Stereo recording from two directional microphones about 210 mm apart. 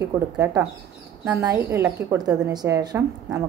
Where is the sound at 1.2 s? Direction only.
15° right (ahead or behind).